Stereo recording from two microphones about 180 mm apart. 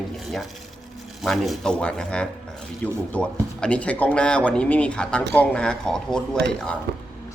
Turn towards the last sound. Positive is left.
turn(degrees=-65)  # may be behind; listen again after turning